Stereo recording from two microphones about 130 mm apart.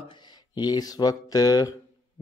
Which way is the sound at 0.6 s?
30° left (ahead or behind).